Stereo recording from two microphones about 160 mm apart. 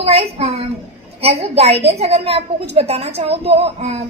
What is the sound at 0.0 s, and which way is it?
A woman's voice, 40° right (ahead or behind).